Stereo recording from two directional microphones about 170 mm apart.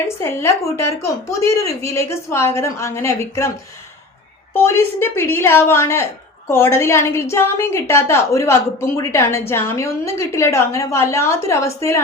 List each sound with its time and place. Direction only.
0.2 s a woman's voice: 15° left (ahead or behind)
4.5 s a woman's voice: 15° left (ahead or behind)